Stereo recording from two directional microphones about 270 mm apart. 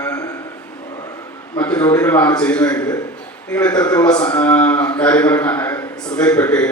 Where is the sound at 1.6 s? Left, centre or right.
Centre.